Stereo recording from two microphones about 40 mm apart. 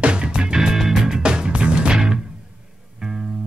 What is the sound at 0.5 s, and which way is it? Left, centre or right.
Music, centre.